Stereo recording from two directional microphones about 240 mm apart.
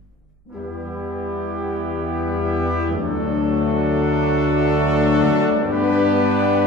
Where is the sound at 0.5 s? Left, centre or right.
Centre.